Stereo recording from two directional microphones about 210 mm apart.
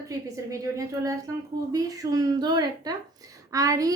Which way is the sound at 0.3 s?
15° right (ahead or behind).